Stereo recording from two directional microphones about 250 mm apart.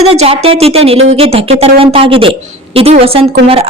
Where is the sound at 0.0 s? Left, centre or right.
Right.